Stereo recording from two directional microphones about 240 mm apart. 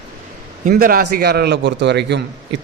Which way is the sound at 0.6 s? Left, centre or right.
Right.